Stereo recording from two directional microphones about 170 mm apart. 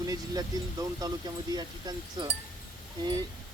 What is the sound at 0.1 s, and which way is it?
Speech, 20° right (ahead or behind).